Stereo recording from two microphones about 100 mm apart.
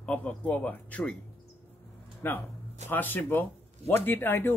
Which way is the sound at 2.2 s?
20° left (ahead or behind).